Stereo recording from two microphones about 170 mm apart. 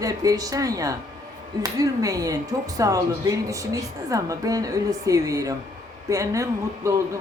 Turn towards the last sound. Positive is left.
turn(degrees=-20)  # may be behind; listen again after turning